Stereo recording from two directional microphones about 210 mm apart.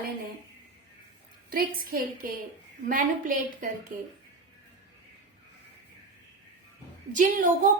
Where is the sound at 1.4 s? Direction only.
45° right (ahead or behind).